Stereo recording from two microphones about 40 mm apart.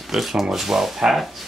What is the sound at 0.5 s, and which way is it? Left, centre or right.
Speech, centre.